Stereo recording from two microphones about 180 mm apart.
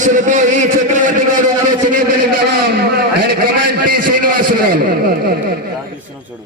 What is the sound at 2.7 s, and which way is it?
A man's voice, 60° right (ahead or behind).